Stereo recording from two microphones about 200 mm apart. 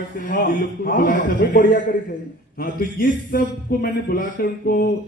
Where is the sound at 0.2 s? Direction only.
45° left (ahead or behind).